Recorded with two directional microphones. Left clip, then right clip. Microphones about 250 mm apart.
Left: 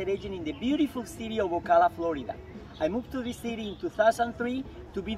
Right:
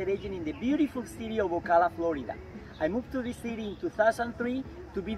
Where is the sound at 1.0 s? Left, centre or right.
Centre.